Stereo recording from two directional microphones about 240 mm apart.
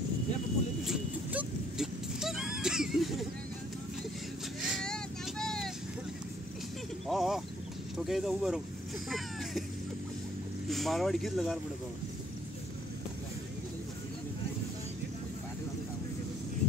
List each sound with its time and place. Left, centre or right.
0.8 s vehicle: centre
4.6 s vehicle: centre
7.1 s a sound: centre
8.1 s speech: centre
9.1 s a sound: centre
10.7 s speech: centre